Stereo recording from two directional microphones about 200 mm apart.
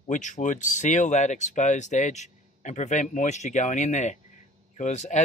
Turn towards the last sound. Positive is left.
turn(degrees=35)  # may be behind; listen again after turning